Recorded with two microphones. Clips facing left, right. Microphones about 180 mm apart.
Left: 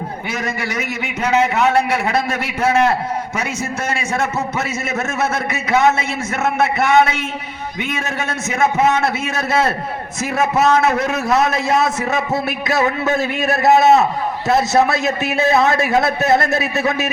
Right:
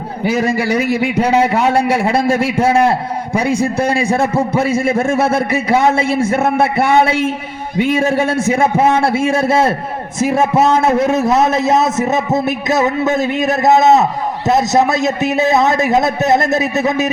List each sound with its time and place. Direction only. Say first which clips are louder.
0.3 s a man's voice: right 11 dB; 30° right (ahead or behind)